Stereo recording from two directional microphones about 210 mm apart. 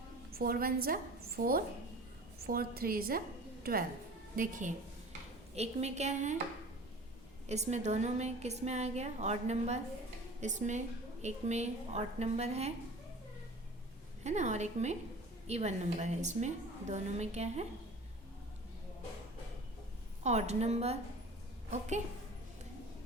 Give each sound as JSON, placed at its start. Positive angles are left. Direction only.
{"t": 0.3, "sound": "a woman's voice", "side_deg": -45}
{"t": 7.4, "sound": "a woman's voice", "side_deg": -30}
{"t": 14.3, "sound": "a woman's voice", "side_deg": -35}
{"t": 20.2, "sound": "a woman's voice", "side_deg": -30}